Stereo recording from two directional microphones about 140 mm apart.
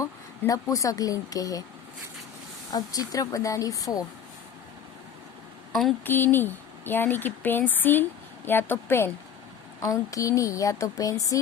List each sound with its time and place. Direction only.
0.0 s speech: 25° left (ahead or behind)
2.7 s speech: 25° left (ahead or behind)
6.1 s speech: 15° left (ahead or behind)